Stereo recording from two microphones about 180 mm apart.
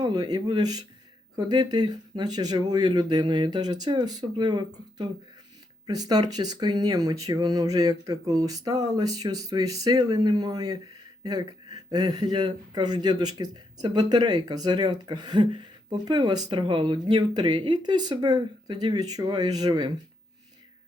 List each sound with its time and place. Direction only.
0.0 s speech: 25° right (ahead or behind)